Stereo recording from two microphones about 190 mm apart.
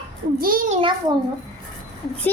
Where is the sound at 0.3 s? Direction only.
50° right (ahead or behind).